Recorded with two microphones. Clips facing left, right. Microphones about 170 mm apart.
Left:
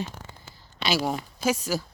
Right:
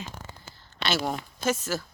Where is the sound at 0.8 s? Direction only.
10° left (ahead or behind).